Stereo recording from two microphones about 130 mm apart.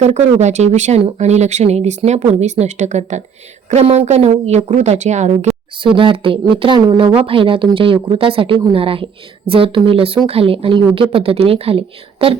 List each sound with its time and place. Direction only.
0.0 s speech: 60° right (ahead or behind)
5.7 s speech: 40° right (ahead or behind)